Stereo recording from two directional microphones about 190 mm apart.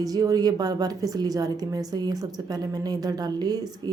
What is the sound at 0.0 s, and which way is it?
A woman's voice, 20° right (ahead or behind).